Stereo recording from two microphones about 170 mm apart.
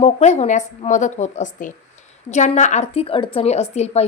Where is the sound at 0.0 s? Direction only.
40° left (ahead or behind).